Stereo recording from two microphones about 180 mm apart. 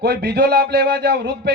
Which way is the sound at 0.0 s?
65° right (ahead or behind).